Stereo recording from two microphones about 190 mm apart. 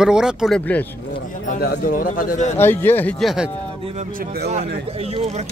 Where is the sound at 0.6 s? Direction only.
10° left (ahead or behind).